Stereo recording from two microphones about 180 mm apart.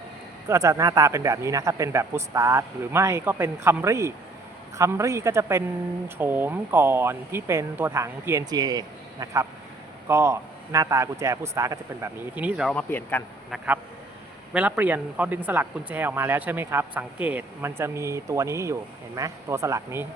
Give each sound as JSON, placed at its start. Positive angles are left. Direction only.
{"t": 0.4, "sound": "speech", "side_deg": -15}
{"t": 12.7, "sound": "speech", "side_deg": 10}
{"t": 14.5, "sound": "speech", "side_deg": -10}